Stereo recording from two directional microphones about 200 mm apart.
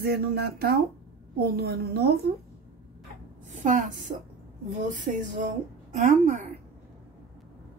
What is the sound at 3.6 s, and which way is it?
A woman's voice, 40° right (ahead or behind).